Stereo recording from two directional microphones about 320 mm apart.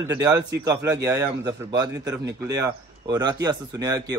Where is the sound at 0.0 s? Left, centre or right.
Centre.